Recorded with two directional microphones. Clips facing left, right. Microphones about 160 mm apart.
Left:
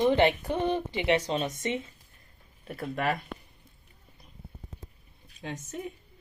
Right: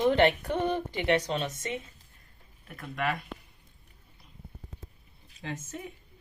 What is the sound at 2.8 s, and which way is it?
Speech, 35° left (ahead or behind).